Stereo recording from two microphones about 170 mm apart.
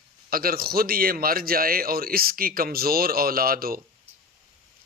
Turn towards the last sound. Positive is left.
turn(degrees=-60)  # may be behind; listen again after turning